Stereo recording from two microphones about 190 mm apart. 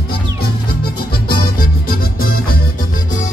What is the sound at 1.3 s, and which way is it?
Music, 50° left (ahead or behind).